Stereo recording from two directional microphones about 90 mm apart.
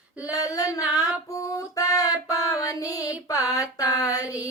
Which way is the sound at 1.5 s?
40° left (ahead or behind).